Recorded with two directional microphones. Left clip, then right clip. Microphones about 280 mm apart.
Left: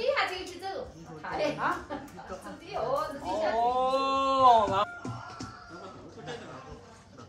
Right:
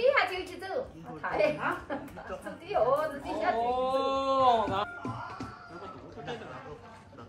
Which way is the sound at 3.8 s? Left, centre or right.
Left.